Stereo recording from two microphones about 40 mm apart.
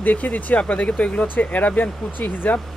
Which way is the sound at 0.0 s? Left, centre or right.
Left.